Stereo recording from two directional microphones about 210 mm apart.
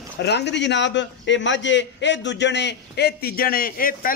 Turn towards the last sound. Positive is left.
turn(degrees=40)  # may be behind; listen again after turning